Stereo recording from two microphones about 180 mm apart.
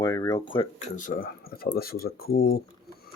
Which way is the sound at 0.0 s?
20° left (ahead or behind).